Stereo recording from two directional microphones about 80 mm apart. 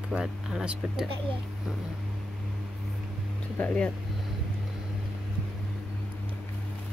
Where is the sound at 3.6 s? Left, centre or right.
Centre.